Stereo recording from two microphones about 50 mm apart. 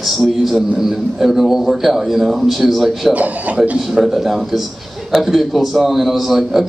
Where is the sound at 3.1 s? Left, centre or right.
Right.